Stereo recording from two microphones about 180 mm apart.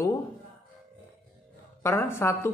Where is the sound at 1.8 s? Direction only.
15° left (ahead or behind).